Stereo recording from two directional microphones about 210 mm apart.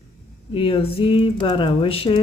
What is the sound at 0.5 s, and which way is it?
Speech, 25° left (ahead or behind).